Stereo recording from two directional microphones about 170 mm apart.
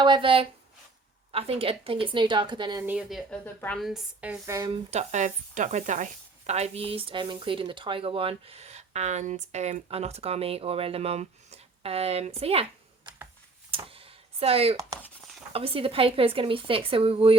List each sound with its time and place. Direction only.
0.0 s speech: 30° right (ahead or behind)
2.8 s speech: 5° right (ahead or behind)
4.5 s speech: 25° right (ahead or behind)
4.9 s speech: 45° right (ahead or behind)
13.7 s a sound: 35° right (ahead or behind)
15.5 s speech: 35° right (ahead or behind)